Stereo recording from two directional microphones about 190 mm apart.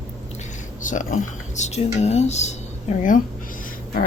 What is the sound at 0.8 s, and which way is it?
Speech, 40° left (ahead or behind).